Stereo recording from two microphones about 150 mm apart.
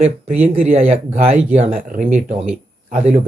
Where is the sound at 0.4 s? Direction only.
45° right (ahead or behind).